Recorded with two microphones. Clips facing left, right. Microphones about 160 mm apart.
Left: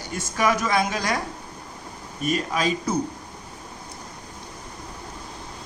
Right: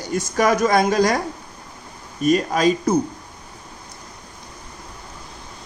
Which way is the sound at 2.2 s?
40° right (ahead or behind).